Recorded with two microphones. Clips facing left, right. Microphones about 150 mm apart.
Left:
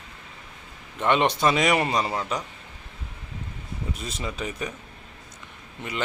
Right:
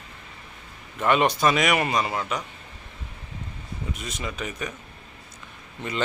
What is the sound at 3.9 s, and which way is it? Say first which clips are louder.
Speech: left 1 dB; 30° left (ahead or behind).